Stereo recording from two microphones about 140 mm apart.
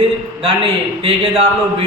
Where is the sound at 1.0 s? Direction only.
40° right (ahead or behind).